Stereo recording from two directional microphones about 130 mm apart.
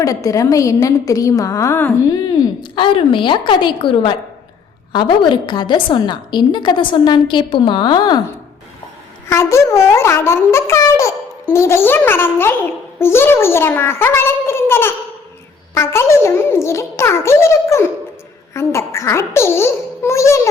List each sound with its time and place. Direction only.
0.0 s a woman's voice: 25° left (ahead or behind)
2.7 s a woman's voice: 40° left (ahead or behind)
9.3 s a woman's voice: 20° left (ahead or behind)